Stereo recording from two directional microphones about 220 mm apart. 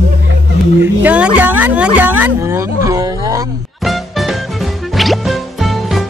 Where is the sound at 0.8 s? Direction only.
5° right (ahead or behind).